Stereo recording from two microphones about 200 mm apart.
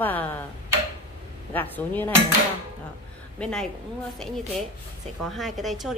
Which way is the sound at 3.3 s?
5° left (ahead or behind).